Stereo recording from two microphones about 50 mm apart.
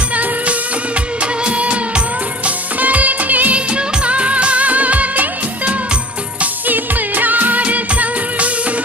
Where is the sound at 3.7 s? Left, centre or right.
Centre.